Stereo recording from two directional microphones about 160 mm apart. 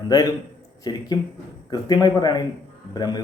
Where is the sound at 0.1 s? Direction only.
20° left (ahead or behind).